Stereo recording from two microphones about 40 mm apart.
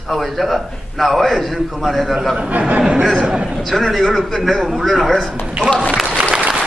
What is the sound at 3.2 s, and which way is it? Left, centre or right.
Speech, centre.